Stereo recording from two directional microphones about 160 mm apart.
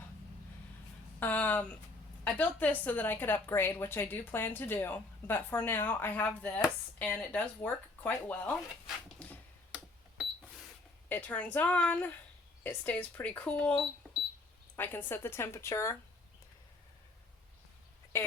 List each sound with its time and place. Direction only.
1.2 s a woman's voice: 10° left (ahead or behind)
9.1 s a sound: 10° left (ahead or behind)
11.1 s a woman's voice: 10° left (ahead or behind)